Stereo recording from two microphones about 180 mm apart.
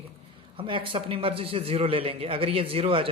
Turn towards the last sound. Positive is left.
turn(degrees=-30)  # may be behind; listen again after turning